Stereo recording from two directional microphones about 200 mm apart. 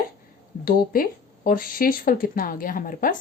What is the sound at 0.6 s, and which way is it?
Speech, 45° left (ahead or behind).